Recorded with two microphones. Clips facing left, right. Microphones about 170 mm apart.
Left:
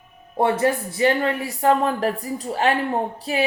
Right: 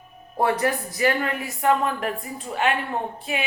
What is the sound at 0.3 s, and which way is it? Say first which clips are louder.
A woman's voice: left 3 dB; 25° left (ahead or behind).